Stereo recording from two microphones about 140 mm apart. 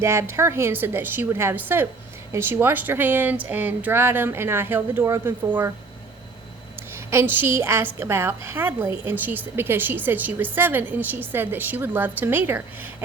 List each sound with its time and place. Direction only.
0.0 s a woman's voice: 20° right (ahead or behind)
7.1 s a woman's voice: 15° right (ahead or behind)